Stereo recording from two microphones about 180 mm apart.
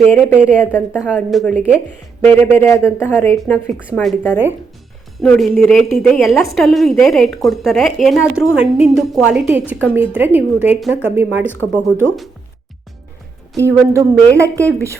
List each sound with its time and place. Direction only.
0.3 s speech: 5° right (ahead or behind)
1.0 s a woman's voice: 5° left (ahead or behind)
11.5 s speech: 10° left (ahead or behind)
13.6 s speech: 15° right (ahead or behind)